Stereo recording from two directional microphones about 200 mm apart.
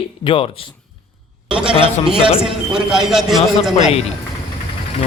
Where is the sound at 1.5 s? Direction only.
5° right (ahead or behind).